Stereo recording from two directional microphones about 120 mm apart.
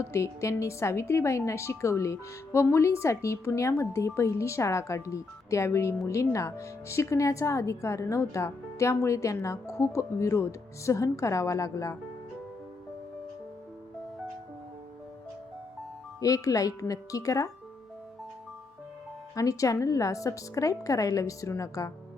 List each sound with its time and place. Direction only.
0.0 s speech: 25° left (ahead or behind)
16.2 s speech: 30° left (ahead or behind)
19.4 s speech: 30° left (ahead or behind)